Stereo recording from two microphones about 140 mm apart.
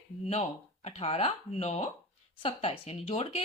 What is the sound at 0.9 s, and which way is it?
A woman's voice, 45° left (ahead or behind).